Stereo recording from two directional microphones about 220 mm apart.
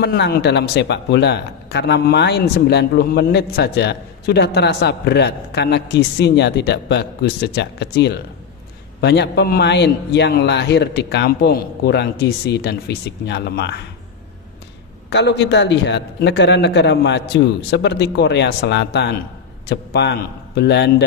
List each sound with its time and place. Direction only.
0.0 s speech: 50° left (ahead or behind)
15.0 s speech: 50° left (ahead or behind)